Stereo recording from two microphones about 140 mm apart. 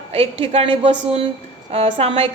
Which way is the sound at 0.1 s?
45° right (ahead or behind).